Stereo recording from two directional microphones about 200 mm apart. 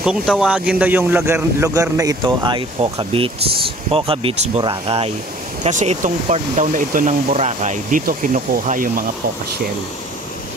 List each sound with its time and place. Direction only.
0.0 s speech: centre (ahead or behind); by 9.0 s 45° right (ahead or behind)